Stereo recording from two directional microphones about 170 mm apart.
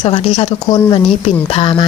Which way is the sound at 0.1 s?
35° left (ahead or behind).